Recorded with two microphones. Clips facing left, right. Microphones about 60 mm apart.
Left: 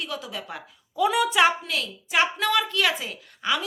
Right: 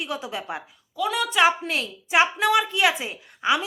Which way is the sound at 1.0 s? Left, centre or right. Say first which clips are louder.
Left 3 dB; centre.